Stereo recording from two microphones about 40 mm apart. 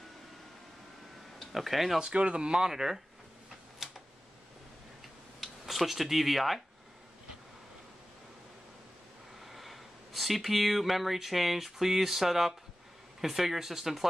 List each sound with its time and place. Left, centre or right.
1.5 s speech: centre
2.0 s speech: right
3.8 s a sound: centre
5.4 s speech: centre
9.4 s speech: centre